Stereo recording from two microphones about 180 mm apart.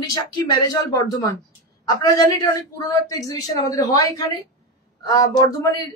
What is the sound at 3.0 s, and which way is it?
Speech, 20° left (ahead or behind).